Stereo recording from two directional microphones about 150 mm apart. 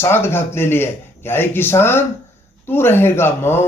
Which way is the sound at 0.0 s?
15° left (ahead or behind).